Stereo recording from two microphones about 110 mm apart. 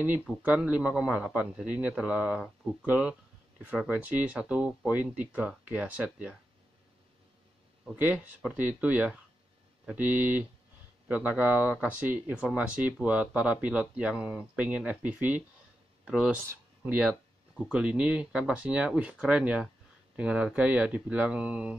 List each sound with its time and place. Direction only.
0.4 s speech: 10° right (ahead or behind)
7.9 s speech: 15° right (ahead or behind)